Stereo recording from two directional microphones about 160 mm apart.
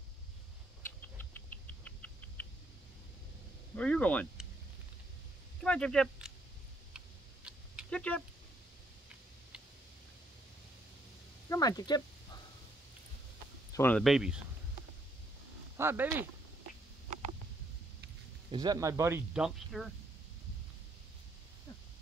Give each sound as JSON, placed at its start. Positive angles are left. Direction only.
{"t": 1.0, "sound": "rodents", "side_deg": 10}
{"t": 3.7, "sound": "speech", "side_deg": 5}
{"t": 5.6, "sound": "speech", "side_deg": 5}
{"t": 7.9, "sound": "speech", "side_deg": 10}
{"t": 11.4, "sound": "a sound", "side_deg": 20}
{"t": 13.7, "sound": "speech", "side_deg": 10}
{"t": 14.0, "sound": "speech", "side_deg": -5}
{"t": 15.8, "sound": "speech", "side_deg": -15}
{"t": 18.5, "sound": "speech", "side_deg": -25}
{"t": 19.3, "sound": "speech", "side_deg": 0}